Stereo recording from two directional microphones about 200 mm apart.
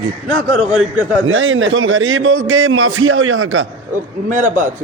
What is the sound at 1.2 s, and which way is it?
A man's voice, 80° right.